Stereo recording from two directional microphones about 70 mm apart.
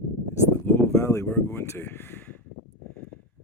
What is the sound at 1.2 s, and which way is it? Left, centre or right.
Speech, left.